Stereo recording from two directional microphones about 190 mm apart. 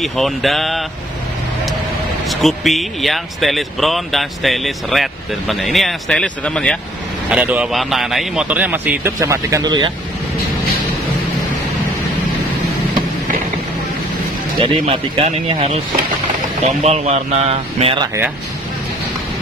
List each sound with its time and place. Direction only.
0.0 s speech: centre (ahead or behind)
2.2 s speech: centre (ahead or behind)
7.2 s a man's voice: 5° right (ahead or behind); by 9.9 s 20° right (ahead or behind)
14.6 s speech: 30° right (ahead or behind)